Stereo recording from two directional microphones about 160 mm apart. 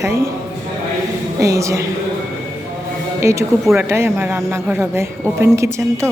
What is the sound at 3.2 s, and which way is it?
Speech, 20° right (ahead or behind).